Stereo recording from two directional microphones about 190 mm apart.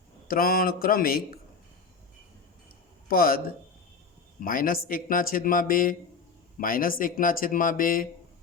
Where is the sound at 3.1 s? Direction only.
50° left (ahead or behind).